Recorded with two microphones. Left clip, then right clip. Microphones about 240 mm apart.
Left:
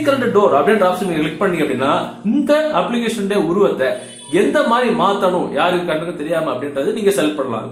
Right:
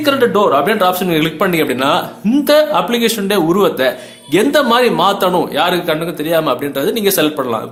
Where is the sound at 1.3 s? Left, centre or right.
Right.